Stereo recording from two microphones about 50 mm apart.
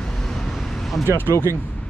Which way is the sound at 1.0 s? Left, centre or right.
Right.